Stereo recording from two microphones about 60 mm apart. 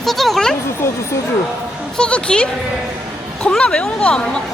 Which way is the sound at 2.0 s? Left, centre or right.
Centre.